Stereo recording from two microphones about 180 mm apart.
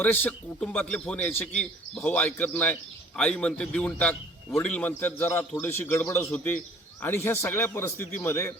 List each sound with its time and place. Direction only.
0.0 s a man's voice: 10° left (ahead or behind)